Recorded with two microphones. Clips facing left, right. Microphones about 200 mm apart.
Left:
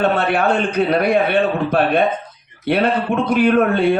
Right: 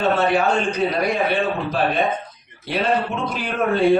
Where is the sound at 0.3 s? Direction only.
60° left (ahead or behind).